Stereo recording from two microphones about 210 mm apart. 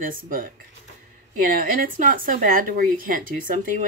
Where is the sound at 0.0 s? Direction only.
40° right (ahead or behind).